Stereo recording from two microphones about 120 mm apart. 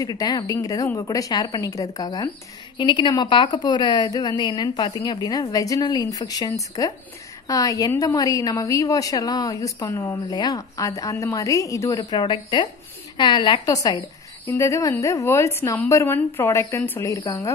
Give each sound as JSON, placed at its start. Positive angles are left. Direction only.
{"t": 0.0, "sound": "a woman's voice", "side_deg": 30}
{"t": 14.4, "sound": "a woman's voice", "side_deg": 25}